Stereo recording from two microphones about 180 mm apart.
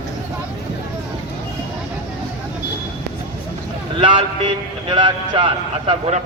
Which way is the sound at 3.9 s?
30° right (ahead or behind).